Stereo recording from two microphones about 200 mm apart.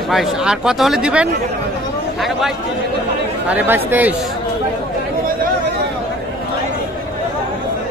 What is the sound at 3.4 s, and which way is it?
Speech, 10° right (ahead or behind).